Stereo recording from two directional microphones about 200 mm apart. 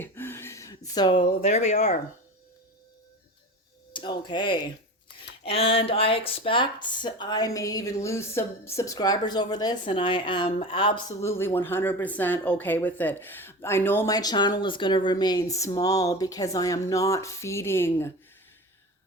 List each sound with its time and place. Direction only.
0.0 s speech: 10° left (ahead or behind); by 2.0 s 35° left (ahead or behind)
3.9 s speech: 25° left (ahead or behind)
11.2 s speech: 10° left (ahead or behind)